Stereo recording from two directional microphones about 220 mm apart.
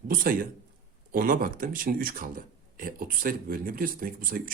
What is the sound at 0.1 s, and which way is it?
A man's voice, 40° right (ahead or behind).